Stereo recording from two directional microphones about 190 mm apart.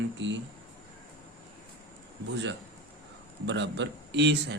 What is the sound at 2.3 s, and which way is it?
A man's voice, 70° right (ahead or behind).